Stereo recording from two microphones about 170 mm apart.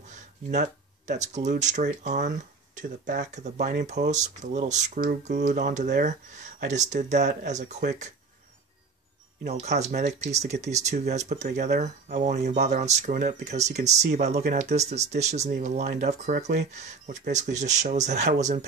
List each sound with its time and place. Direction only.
0.1 s speech: 45° right (ahead or behind)
9.5 s speech: 40° right (ahead or behind)
16.3 s speech: 75° right (ahead or behind)
16.7 s speech: 45° right (ahead or behind)